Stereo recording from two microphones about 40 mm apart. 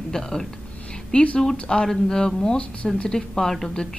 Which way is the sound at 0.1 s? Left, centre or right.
Centre.